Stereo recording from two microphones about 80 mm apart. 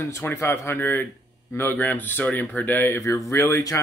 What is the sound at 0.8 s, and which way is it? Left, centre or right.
Speech, left.